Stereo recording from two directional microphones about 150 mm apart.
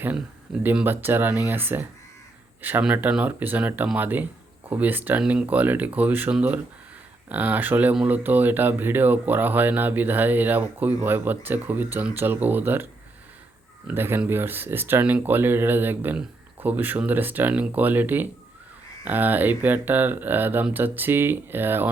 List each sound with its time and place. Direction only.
0.6 s speech: 10° right (ahead or behind)